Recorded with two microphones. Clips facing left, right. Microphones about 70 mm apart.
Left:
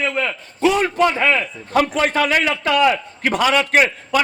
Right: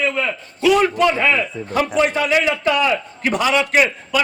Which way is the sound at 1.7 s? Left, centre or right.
Left.